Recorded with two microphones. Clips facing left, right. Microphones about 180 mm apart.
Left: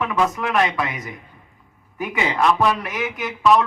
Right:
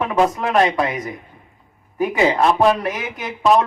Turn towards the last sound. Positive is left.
turn(degrees=-35)  # may be behind; listen again after turning